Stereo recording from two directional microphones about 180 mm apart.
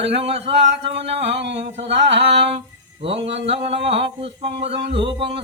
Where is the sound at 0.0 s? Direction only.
35° right (ahead or behind).